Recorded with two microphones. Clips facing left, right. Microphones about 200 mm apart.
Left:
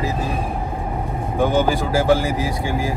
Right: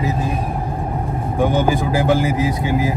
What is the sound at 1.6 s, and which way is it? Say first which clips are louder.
Speech: even; 20° right (ahead or behind).